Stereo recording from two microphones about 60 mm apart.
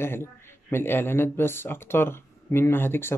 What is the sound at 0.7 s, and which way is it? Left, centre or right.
A man's voice, left.